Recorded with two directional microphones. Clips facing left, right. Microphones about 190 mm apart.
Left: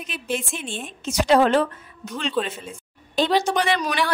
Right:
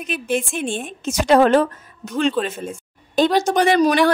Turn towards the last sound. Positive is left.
turn(degrees=-40)  # may be behind; listen again after turning